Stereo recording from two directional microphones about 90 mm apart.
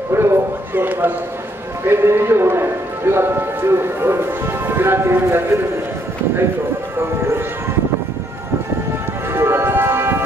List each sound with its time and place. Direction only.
0.1 s a man's voice: 25° right (ahead or behind)
9.3 s music: 30° right (ahead or behind)